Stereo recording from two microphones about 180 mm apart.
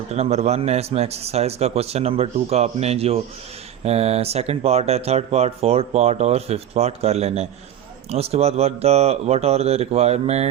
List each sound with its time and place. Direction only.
0.1 s speech: 35° right (ahead or behind)